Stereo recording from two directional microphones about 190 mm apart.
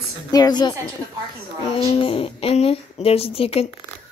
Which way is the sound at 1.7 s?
30° left (ahead or behind).